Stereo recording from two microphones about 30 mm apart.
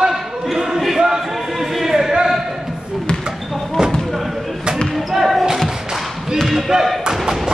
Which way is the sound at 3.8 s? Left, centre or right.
Centre.